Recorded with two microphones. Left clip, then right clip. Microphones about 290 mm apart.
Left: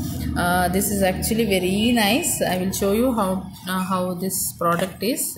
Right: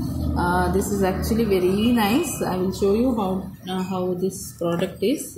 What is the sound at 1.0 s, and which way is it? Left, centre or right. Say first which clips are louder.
A woman's voice: left 1 dB; left.